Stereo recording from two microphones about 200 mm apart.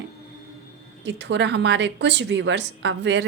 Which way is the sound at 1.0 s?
60° right (ahead or behind).